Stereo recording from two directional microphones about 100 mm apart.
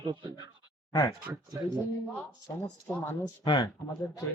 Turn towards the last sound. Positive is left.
turn(degrees=50)  # may be behind; listen again after turning